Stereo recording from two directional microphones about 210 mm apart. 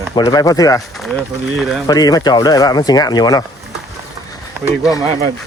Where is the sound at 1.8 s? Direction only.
20° left (ahead or behind).